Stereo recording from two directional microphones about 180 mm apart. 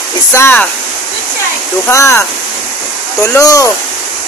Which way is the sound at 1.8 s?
15° left (ahead or behind).